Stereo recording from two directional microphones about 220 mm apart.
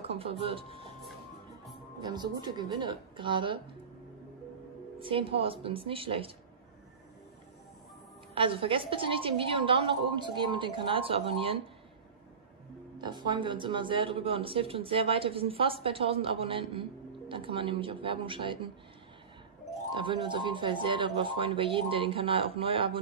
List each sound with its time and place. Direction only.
0.0 s speech: 25° right (ahead or behind)
2.0 s speech: 20° right (ahead or behind)
4.9 s speech: 25° right (ahead or behind)
8.4 s speech: 25° right (ahead or behind)
13.0 s speech: 20° right (ahead or behind)
19.9 s speech: 20° right (ahead or behind)